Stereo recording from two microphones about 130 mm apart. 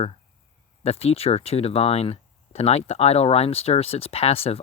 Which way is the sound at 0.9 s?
50° left (ahead or behind).